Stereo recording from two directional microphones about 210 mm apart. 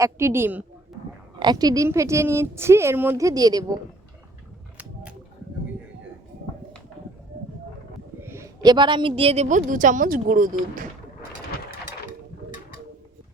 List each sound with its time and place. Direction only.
0.0 s a woman's voice: 15° right (ahead or behind)
8.2 s a woman's voice: 10° right (ahead or behind); by 10.5 s 40° right (ahead or behind)